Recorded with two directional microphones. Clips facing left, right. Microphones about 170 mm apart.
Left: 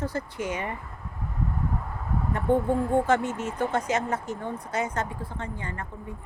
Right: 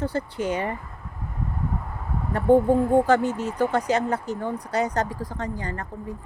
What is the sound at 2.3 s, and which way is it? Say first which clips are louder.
Speech: right 6 dB; 35° right (ahead or behind).